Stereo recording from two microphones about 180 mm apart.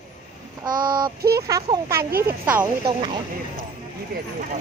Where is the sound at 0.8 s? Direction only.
25° right (ahead or behind).